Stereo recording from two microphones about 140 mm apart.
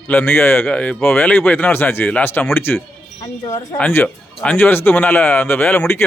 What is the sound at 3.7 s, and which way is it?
Speech, 10° left (ahead or behind).